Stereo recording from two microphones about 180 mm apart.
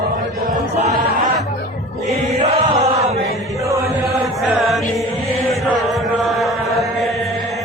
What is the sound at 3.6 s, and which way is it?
Chant, 15° right (ahead or behind).